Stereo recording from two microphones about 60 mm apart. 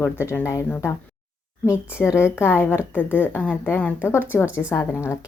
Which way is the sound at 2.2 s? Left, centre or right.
Left.